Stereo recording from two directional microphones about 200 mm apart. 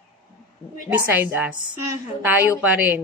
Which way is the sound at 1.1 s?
10° right (ahead or behind).